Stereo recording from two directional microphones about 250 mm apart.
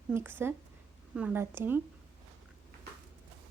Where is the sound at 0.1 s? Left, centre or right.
Centre.